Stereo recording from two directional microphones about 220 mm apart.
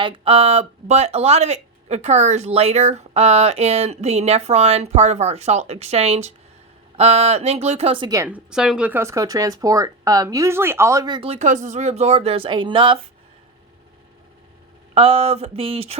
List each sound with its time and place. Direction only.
0.0 s speech: 25° right (ahead or behind)
14.9 s speech: 25° right (ahead or behind)